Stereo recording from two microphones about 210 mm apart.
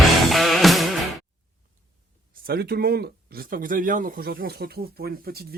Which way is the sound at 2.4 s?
45° right (ahead or behind).